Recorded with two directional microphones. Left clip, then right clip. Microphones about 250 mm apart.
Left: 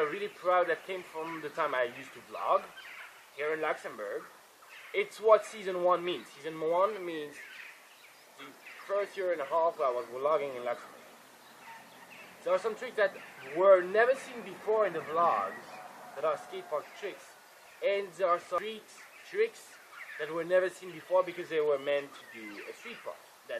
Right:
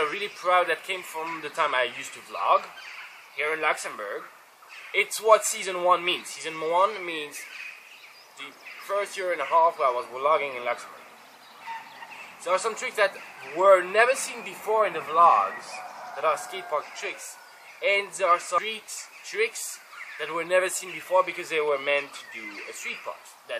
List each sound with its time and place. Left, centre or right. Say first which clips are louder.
0.0 s speech: right 5 dB; centre